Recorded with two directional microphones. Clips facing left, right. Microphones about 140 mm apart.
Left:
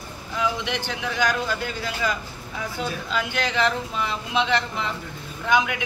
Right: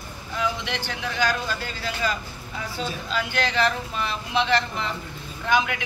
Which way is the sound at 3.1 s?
15° left (ahead or behind).